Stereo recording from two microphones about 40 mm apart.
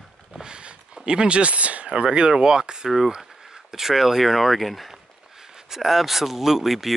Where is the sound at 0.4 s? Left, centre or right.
Right.